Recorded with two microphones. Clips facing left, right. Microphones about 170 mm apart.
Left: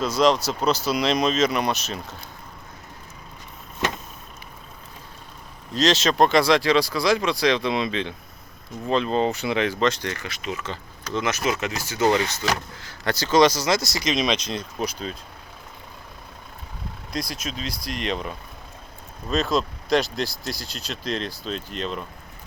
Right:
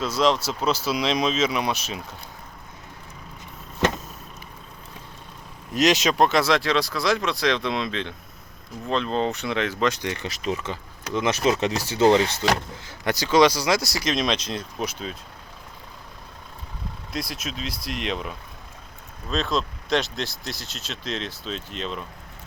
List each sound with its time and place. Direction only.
0.2 s speech: 5° right (ahead or behind)
5.7 s speech: 15° right (ahead or behind)
6.1 s speech: 5° right (ahead or behind)
9.8 s speech: 15° right (ahead or behind)
10.2 s speech: 35° right (ahead or behind)
10.6 s speech: 15° right (ahead or behind)
11.3 s speech: 30° right (ahead or behind)
12.0 s speech: 20° right (ahead or behind)
13.2 s speech: 10° right (ahead or behind)
17.1 s speech: 5° right (ahead or behind)